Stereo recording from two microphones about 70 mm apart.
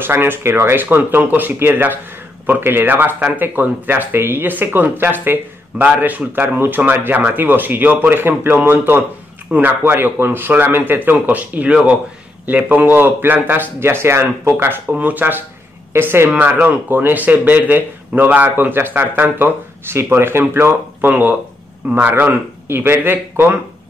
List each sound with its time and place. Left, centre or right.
0.0 s speech: right
14.9 s speech: right
16.3 s speech: right